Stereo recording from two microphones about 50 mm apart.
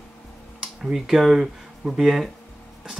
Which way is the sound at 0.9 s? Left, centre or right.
Centre.